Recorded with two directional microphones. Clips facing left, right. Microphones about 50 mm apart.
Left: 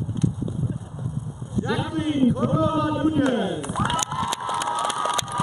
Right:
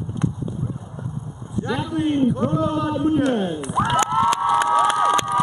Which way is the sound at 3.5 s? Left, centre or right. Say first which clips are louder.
Right 4 dB; right.